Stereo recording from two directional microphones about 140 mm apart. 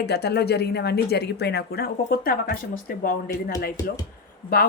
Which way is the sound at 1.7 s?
90° left.